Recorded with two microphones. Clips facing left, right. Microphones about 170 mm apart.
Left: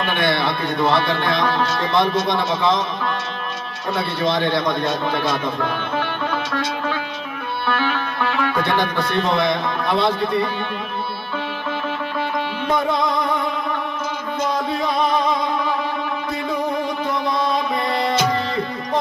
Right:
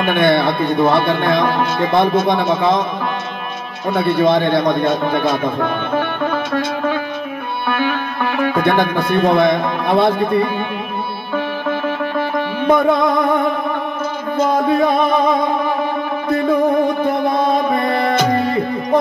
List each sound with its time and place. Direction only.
0.0 s speech: 55° right (ahead or behind)
3.9 s speech: 55° right (ahead or behind)
12.2 s music: 50° right (ahead or behind)
14.5 s speech: 55° right (ahead or behind)
16.3 s music: 55° right (ahead or behind)